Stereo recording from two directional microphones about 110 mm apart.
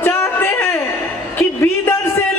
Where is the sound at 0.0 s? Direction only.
20° left (ahead or behind).